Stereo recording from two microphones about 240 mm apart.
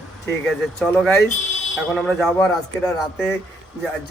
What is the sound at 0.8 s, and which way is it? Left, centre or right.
Speech, centre.